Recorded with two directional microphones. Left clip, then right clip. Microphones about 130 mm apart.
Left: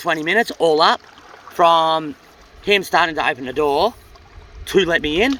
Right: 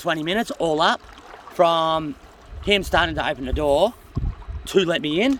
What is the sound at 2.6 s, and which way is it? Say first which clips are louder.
Speech: left 4 dB; 65° right (ahead or behind).